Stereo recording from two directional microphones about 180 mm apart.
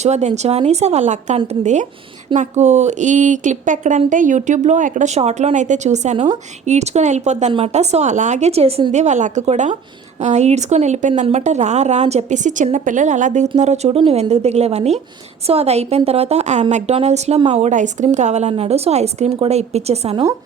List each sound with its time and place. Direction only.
0.0 s a woman's voice: 40° right (ahead or behind)